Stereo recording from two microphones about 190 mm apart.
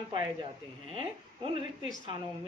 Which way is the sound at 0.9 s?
30° right (ahead or behind).